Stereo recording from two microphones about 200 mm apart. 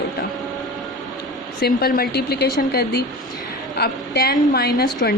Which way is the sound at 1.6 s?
50° left (ahead or behind).